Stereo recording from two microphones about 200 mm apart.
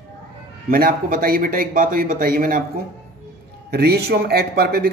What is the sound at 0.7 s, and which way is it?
Speech, 45° right (ahead or behind).